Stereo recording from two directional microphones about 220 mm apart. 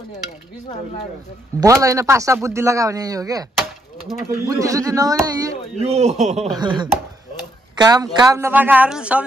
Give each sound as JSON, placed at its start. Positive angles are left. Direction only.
{"t": 1.6, "sound": "speech", "side_deg": -15}
{"t": 5.9, "sound": "a man's voice", "side_deg": -30}